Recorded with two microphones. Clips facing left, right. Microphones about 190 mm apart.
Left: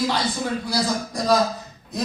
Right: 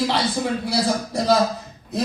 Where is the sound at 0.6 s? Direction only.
25° right (ahead or behind).